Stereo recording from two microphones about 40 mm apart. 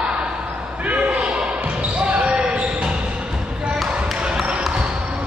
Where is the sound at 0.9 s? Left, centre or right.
Right.